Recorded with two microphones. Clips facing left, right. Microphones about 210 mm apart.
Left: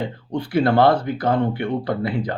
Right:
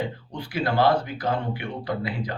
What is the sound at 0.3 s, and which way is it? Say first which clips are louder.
Speech: left 7 dB; 60° left (ahead or behind).